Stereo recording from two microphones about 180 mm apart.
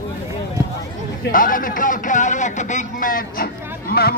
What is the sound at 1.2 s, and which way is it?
Speech, 50° left (ahead or behind).